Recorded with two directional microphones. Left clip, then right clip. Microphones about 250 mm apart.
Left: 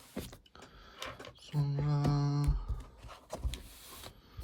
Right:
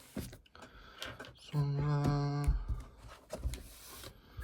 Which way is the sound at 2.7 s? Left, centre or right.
Centre.